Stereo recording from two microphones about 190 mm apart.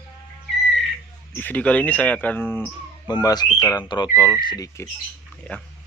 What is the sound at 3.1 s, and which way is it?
Speech, 20° left (ahead or behind).